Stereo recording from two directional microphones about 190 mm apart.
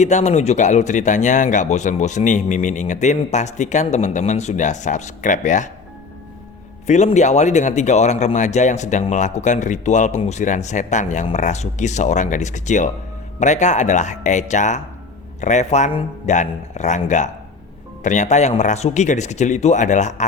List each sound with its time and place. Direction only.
0.0 s speech: 35° left (ahead or behind)
6.8 s speech: 40° left (ahead or behind)